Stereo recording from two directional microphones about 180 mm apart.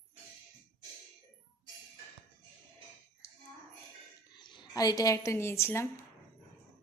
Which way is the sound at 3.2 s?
15° left (ahead or behind).